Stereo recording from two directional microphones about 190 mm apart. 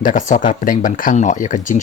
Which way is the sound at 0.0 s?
40° left (ahead or behind).